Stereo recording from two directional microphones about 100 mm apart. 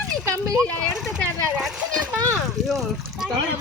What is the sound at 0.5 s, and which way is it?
Speech, 10° left (ahead or behind).